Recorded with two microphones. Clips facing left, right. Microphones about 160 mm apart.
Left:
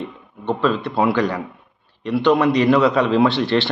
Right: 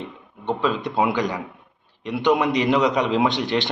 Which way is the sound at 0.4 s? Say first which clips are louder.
Left 3 dB; 15° right (ahead or behind).